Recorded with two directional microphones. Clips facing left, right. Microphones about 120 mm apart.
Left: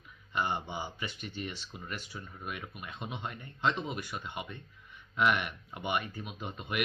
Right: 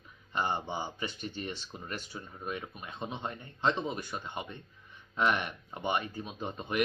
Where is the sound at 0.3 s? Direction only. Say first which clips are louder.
Right 1 dB; 35° right (ahead or behind).